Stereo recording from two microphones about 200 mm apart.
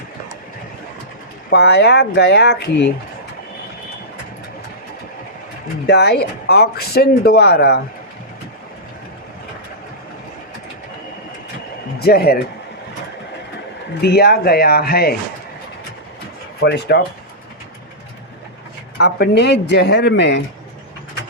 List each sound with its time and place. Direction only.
1.5 s speech: 55° left (ahead or behind)
5.8 s speech: 55° left (ahead or behind)
11.9 s speech: 50° left (ahead or behind)
14.0 s speech: 55° left (ahead or behind)
16.6 s speech: 55° left (ahead or behind)
18.9 s speech: 55° left (ahead or behind)